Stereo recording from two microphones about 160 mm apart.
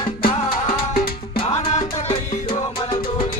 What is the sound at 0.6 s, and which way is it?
Music, 70° left (ahead or behind).